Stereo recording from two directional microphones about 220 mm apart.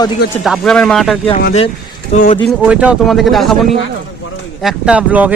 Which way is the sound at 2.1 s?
30° left (ahead or behind).